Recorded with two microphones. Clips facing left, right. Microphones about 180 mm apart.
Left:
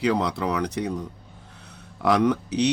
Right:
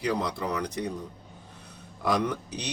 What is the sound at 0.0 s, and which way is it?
Speech, 75° left (ahead or behind).